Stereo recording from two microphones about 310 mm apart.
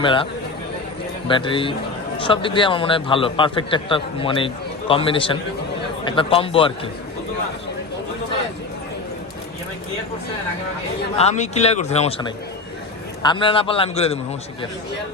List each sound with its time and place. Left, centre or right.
0.0 s a man's voice: centre
1.3 s a man's voice: centre
11.2 s speech: left
13.2 s a man's voice: centre